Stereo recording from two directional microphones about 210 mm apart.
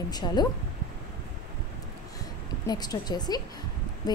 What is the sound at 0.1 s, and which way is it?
Speech, 20° left (ahead or behind).